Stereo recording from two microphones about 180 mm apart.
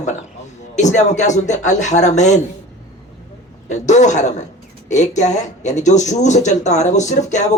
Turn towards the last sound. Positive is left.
turn(degrees=40)  # may be behind; listen again after turning